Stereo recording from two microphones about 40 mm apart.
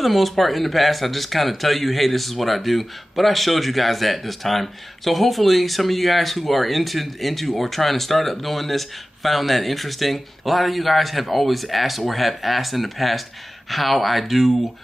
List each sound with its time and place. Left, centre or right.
0.0 s speech: centre